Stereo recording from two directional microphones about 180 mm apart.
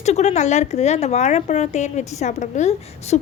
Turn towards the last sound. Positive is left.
turn(degrees=40)  # may be behind; listen again after turning